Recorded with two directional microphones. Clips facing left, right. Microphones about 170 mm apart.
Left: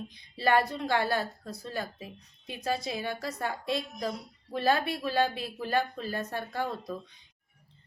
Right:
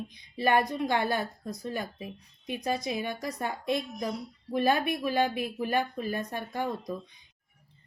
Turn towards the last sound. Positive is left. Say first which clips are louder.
# right 1 dB
turn(degrees=-15)  # may be behind; listen again after turning